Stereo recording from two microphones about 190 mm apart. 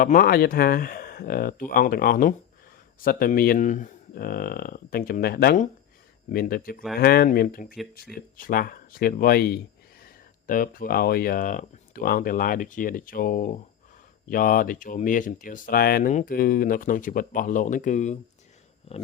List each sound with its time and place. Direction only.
0.0 s speech: 50° left (ahead or behind)